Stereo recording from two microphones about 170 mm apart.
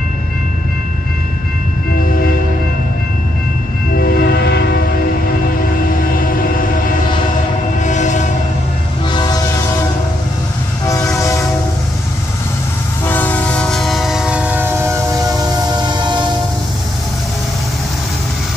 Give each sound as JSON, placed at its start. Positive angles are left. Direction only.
{"t": 2.0, "sound": "train", "side_deg": 55}
{"t": 3.9, "sound": "train", "side_deg": 65}
{"t": 6.1, "sound": "vehicle", "side_deg": 55}
{"t": 7.8, "sound": "train", "side_deg": 45}
{"t": 9.1, "sound": "train", "side_deg": 25}
{"t": 10.9, "sound": "train", "side_deg": 20}
{"t": 13.0, "sound": "train", "side_deg": 10}